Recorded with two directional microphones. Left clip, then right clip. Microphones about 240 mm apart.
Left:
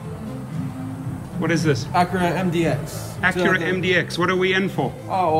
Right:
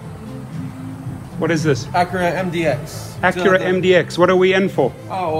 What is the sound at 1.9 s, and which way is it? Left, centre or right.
Speech, centre.